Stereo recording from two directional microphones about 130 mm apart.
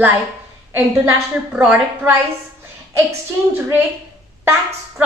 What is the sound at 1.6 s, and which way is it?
Speech, 15° right (ahead or behind).